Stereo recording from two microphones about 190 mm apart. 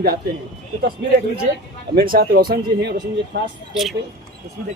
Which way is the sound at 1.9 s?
50° right (ahead or behind).